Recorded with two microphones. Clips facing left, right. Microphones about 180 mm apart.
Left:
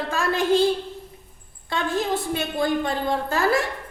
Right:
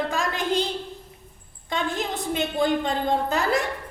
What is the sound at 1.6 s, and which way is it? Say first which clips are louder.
A woman's voice: left 3 dB; 20° right (ahead or behind).